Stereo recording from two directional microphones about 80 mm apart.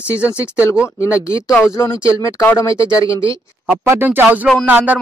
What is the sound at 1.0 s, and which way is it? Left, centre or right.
Speech, left.